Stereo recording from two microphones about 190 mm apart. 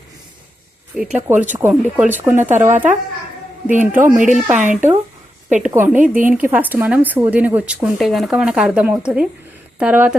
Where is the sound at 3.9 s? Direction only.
10° right (ahead or behind).